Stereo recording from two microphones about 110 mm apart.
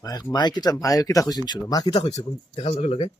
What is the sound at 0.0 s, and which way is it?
Speech, 35° left (ahead or behind).